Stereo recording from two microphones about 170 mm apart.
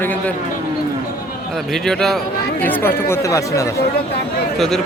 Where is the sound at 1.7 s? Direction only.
Centre (ahead or behind); by 3.7 s 20° left (ahead or behind).